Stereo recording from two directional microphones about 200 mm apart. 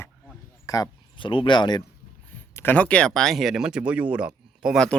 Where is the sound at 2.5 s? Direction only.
10° left (ahead or behind).